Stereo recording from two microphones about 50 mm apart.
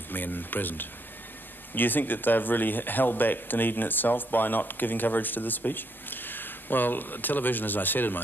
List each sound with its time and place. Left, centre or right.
0.1 s speech: left